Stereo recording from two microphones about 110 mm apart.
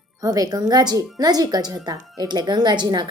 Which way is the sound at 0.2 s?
35° right (ahead or behind).